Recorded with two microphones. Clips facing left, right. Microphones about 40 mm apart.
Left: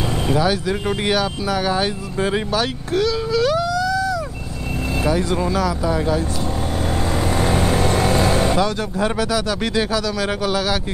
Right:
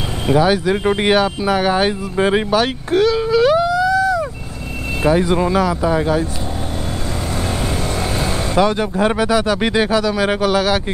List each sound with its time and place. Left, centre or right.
0.3 s speech: centre
7.3 s vehicle: centre
8.5 s speech: right